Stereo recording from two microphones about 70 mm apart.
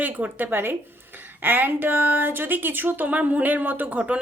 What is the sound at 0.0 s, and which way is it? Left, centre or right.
Speech, right.